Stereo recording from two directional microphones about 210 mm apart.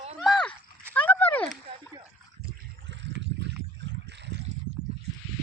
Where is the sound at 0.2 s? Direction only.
Centre (ahead or behind).